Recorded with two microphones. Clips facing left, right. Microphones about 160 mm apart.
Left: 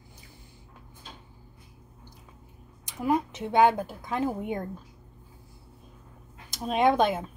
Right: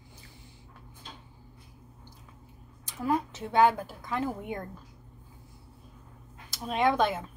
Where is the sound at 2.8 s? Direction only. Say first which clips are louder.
Left 3 dB; 15° left (ahead or behind).